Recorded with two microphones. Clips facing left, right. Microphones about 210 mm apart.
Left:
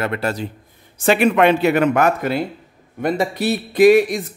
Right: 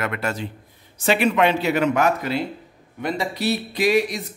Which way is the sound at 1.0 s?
50° left (ahead or behind).